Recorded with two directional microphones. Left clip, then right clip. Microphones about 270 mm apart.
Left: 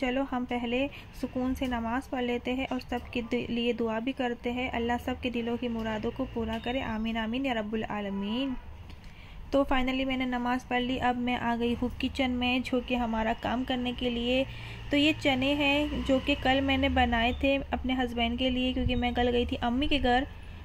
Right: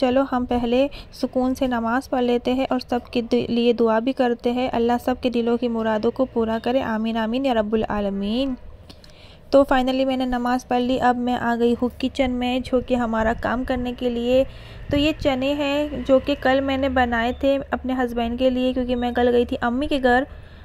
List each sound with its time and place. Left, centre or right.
0.0 s a woman's voice: right
9.5 s a woman's voice: right